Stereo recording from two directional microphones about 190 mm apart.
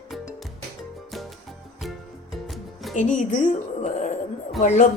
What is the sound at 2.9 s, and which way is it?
Speech, 40° left (ahead or behind).